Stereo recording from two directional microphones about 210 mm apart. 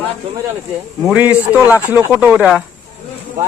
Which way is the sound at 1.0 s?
5° right (ahead or behind).